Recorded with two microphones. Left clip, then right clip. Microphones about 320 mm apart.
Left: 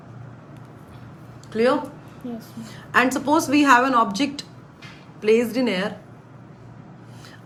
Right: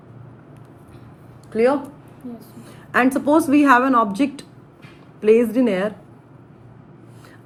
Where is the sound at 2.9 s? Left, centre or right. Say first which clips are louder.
Right 2 dB; centre.